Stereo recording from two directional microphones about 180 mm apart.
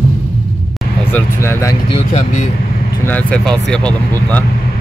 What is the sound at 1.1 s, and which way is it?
Speech, 10° left (ahead or behind).